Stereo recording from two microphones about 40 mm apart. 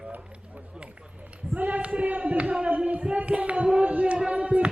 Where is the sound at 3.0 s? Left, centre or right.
Right.